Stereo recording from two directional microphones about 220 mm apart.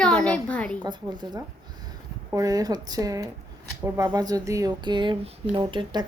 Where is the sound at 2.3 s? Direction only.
15° right (ahead or behind).